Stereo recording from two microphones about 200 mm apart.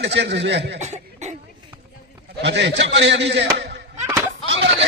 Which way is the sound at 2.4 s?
60° right (ahead or behind).